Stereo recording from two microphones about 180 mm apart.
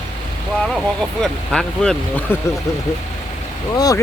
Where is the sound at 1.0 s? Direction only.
5° left (ahead or behind).